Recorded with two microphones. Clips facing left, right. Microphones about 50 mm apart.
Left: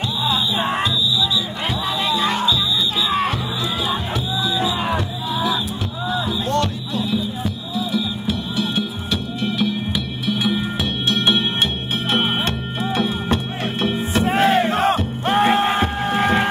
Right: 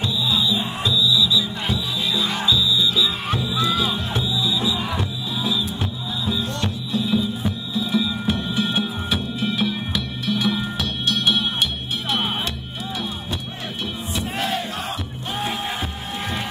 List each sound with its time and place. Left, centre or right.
0.0 s music: left
3.5 s music: left
7.9 s music: right
9.1 s music: centre
10.5 s music: left
13.8 s battle cry: left